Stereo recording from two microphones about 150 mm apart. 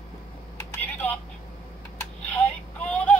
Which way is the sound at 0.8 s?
10° left (ahead or behind).